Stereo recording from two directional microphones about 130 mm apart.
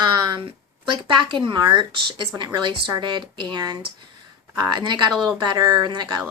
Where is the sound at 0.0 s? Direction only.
35° right (ahead or behind).